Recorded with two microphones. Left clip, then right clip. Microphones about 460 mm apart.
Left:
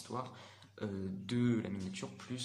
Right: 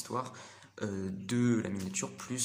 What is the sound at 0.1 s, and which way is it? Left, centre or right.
Speech, left.